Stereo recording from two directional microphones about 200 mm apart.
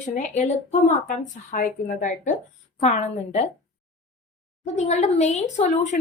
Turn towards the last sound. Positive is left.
turn(degrees=35)  # may be behind; listen again after turning